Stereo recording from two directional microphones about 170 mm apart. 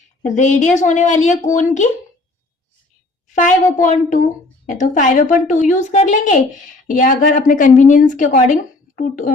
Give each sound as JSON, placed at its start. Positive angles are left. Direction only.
{"t": 0.2, "sound": "a woman's voice", "side_deg": 45}
{"t": 3.3, "sound": "a woman's voice", "side_deg": 50}